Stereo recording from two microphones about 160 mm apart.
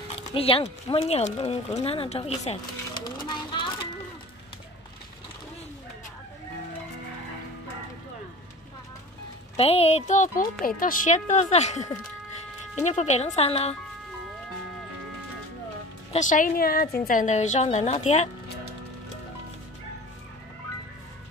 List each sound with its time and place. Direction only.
0.2 s speech: 35° left (ahead or behind)
3.0 s a sound: 25° left (ahead or behind)
9.6 s a woman's voice: 40° left (ahead or behind)
16.1 s a woman's voice: 50° left (ahead or behind); by 16.9 s 65° left (ahead or behind)
17.0 s a woman's voice: 55° left (ahead or behind)